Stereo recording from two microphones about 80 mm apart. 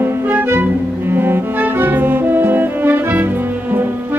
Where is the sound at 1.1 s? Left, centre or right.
Right.